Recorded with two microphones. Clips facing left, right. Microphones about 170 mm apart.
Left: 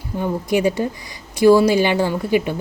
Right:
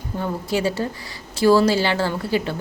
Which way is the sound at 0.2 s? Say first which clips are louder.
Left 4 dB; 15° left (ahead or behind).